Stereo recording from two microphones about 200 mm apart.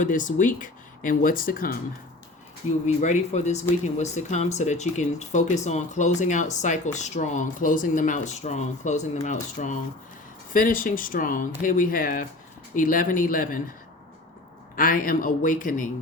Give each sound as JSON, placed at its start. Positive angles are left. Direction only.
{"t": 0.0, "sound": "speech", "side_deg": 40}
{"t": 2.8, "sound": "speech", "side_deg": 35}
{"t": 14.8, "sound": "speech", "side_deg": 45}